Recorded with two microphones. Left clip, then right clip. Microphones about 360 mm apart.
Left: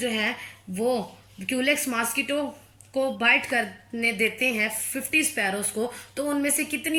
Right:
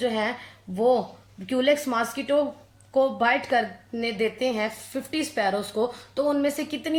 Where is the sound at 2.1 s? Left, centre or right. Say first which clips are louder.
Right 3 dB; right.